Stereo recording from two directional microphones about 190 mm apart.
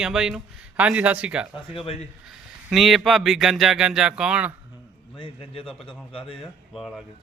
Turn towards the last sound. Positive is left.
turn(degrees=0)  # may be behind; listen again after turning